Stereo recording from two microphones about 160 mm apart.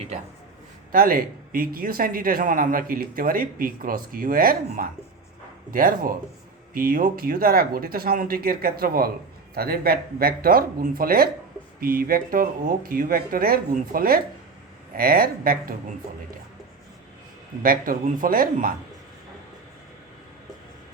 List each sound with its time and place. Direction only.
0.9 s a man's voice: 65° right (ahead or behind)
17.6 s a man's voice: 60° right (ahead or behind)